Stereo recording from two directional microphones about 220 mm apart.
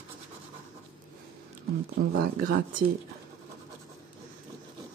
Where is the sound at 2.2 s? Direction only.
45° right (ahead or behind).